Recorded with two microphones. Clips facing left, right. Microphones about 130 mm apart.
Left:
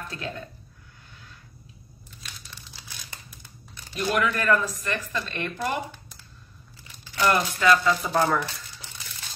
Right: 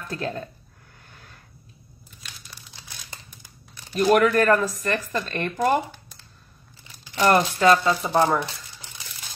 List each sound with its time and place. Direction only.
0.1 s speech: 40° right (ahead or behind)
1.1 s a sound: 55° right (ahead or behind)
3.9 s speech: 50° right (ahead or behind)
7.2 s speech: 40° right (ahead or behind)